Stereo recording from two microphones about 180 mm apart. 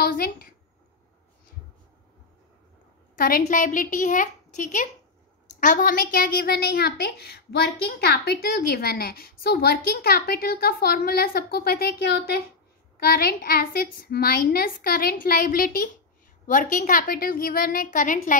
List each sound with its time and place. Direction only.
0.0 s a woman's voice: 60° left (ahead or behind)
3.2 s a woman's voice: 55° left (ahead or behind)